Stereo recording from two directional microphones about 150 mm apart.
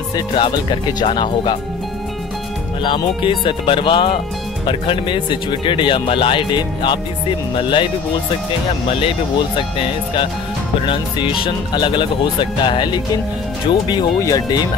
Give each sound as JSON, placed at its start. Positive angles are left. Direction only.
{"t": 0.1, "sound": "speech", "side_deg": 30}
{"t": 2.8, "sound": "speech", "side_deg": 35}
{"t": 9.6, "sound": "speech", "side_deg": 35}